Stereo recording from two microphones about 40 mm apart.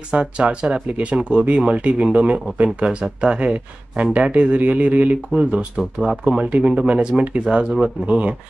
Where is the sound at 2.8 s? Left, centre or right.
Right.